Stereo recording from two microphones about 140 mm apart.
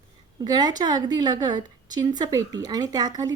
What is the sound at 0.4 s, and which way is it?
A woman's voice, 30° right (ahead or behind).